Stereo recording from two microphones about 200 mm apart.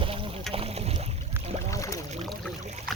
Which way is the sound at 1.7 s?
15° left (ahead or behind).